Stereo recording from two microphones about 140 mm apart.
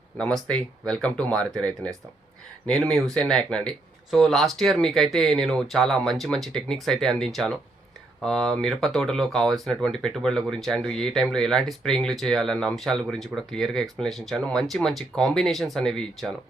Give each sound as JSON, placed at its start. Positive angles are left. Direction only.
{"t": 0.2, "sound": "speech", "side_deg": 5}